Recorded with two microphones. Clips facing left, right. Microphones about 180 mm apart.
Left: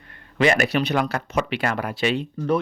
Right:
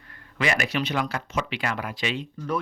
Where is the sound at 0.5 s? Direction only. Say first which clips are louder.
Left 5 dB; 55° left (ahead or behind).